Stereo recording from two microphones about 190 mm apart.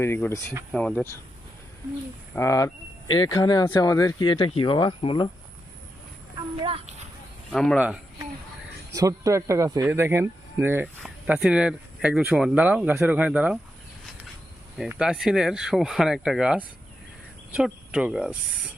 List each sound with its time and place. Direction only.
0.0 s speech: 15° left (ahead or behind)
2.3 s speech: 15° left (ahead or behind)
6.6 s children playing: 30° right (ahead or behind)
7.5 s speech: 5° left (ahead or behind)
8.9 s speech: 20° right (ahead or behind)
14.8 s speech: 5° right (ahead or behind)